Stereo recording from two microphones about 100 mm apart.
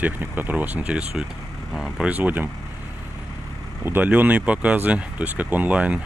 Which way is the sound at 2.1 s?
15° right (ahead or behind).